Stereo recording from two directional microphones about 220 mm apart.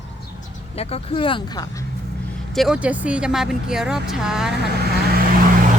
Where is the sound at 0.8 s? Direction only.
25° left (ahead or behind).